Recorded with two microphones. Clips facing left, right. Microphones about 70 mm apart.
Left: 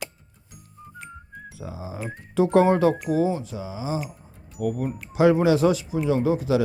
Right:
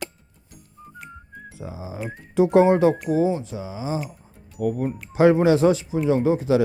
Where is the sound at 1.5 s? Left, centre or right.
Right.